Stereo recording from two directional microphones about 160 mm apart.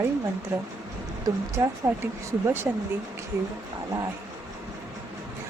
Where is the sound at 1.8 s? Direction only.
15° right (ahead or behind).